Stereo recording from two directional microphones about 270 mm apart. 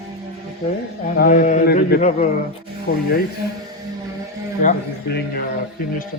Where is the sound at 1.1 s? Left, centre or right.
Left.